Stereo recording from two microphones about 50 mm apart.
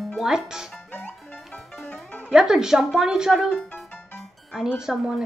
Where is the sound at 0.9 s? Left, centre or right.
Left.